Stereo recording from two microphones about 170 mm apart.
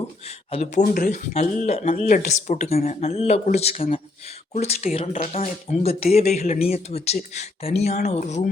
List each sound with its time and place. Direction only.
0.3 s speech: 40° left (ahead or behind)
1.3 s speech: 40° left (ahead or behind)